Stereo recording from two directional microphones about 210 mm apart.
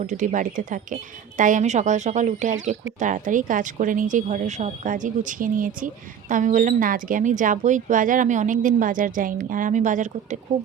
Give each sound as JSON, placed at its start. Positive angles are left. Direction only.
{"t": 0.0, "sound": "speech", "side_deg": -35}